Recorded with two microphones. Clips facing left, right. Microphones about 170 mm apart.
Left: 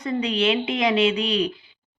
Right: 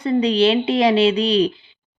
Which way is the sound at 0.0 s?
30° right (ahead or behind).